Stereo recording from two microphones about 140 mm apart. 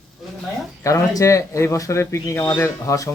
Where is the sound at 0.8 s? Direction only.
25° left (ahead or behind).